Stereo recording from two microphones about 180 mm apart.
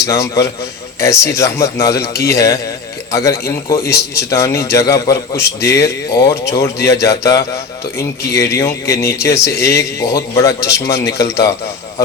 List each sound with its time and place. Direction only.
0.0 s a man's voice: 15° left (ahead or behind)